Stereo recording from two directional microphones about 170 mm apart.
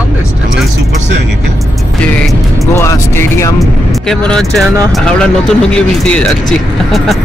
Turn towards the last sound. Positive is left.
turn(degrees=0)  # may be behind; listen again after turning